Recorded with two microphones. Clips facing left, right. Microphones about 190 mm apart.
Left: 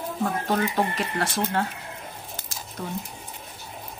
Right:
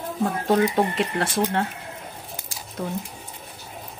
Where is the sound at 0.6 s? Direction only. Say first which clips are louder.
Right 4 dB; 30° right (ahead or behind).